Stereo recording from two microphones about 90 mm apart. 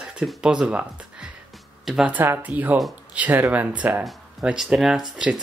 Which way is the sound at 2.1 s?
25° right (ahead or behind).